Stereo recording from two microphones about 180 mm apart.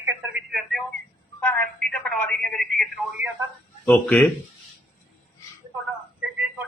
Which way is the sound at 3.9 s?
5° left (ahead or behind).